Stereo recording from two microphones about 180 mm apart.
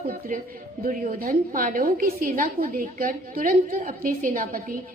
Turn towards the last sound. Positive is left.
turn(degrees=-50)  # may be behind; listen again after turning